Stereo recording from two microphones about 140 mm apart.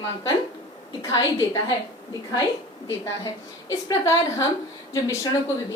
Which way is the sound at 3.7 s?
25° left (ahead or behind).